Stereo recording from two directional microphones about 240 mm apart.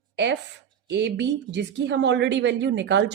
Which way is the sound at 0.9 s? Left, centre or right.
Right.